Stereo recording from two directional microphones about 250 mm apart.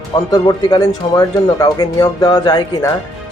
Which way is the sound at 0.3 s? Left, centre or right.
Centre.